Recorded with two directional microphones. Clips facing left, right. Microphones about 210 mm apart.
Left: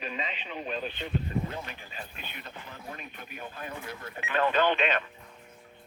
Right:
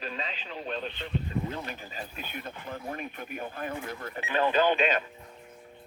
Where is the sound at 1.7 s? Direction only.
40° right (ahead or behind).